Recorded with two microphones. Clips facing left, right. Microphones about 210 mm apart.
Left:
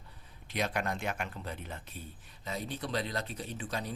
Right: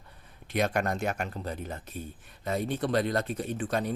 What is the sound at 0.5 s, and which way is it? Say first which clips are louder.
Speech: right 6 dB; 50° right (ahead or behind).